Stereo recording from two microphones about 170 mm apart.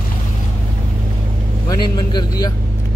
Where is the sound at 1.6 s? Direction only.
25° left (ahead or behind).